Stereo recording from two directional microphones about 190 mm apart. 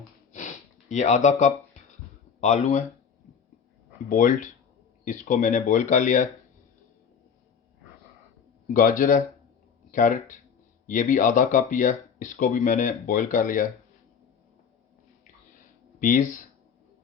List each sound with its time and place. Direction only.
0.3 s sniff: 40° left (ahead or behind)
2.4 s speech: 35° left (ahead or behind)
4.1 s speech: 45° left (ahead or behind)
8.7 s speech: 45° left (ahead or behind)
16.0 s speech: 45° left (ahead or behind)